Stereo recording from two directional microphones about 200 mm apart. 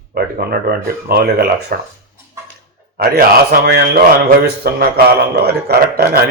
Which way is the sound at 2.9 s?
50° right (ahead or behind).